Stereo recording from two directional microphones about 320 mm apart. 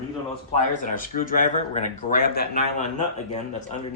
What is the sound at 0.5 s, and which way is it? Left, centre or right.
Speech, left.